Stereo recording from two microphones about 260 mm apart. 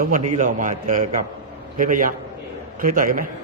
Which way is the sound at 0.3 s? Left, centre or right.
Right.